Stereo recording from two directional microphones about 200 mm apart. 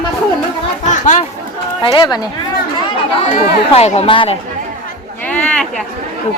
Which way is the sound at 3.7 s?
30° left (ahead or behind).